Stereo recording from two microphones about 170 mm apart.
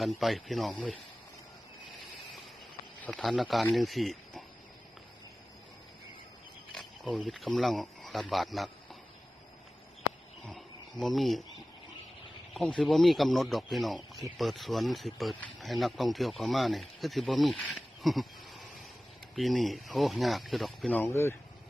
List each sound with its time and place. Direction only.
0.0 s speech: centre (ahead or behind)
3.0 s speech: centre (ahead or behind)
6.7 s speech: centre (ahead or behind)
10.4 s cricket: centre (ahead or behind)
12.5 s speech: 5° left (ahead or behind)